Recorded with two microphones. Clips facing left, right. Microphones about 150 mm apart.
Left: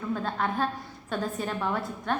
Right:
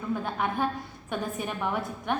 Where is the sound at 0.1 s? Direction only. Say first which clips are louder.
Even; 15° right (ahead or behind).